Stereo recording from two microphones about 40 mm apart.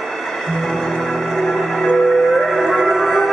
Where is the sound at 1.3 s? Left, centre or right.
Centre.